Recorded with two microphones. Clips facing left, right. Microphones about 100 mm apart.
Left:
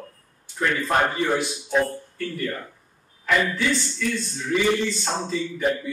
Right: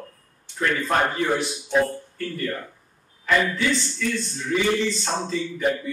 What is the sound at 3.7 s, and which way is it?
Speech, 25° right (ahead or behind).